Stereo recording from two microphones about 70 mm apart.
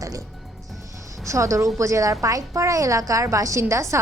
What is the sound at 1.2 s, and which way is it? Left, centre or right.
A woman's voice, right.